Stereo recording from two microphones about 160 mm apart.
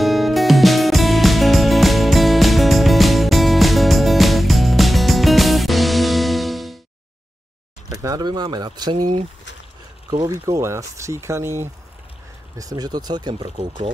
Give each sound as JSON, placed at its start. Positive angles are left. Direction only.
{"t": 0.0, "sound": "music", "side_deg": 0}
{"t": 7.9, "sound": "speech", "side_deg": -20}
{"t": 10.5, "sound": "speech", "side_deg": -20}